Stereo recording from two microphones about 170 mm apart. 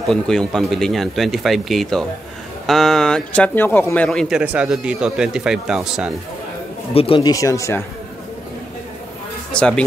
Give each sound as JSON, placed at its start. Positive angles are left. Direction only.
{"t": 0.1, "sound": "speech", "side_deg": 5}
{"t": 4.4, "sound": "speech", "side_deg": -5}
{"t": 6.9, "sound": "a man's voice", "side_deg": 35}
{"t": 7.2, "sound": "speech", "side_deg": 20}
{"t": 9.5, "sound": "speech", "side_deg": 5}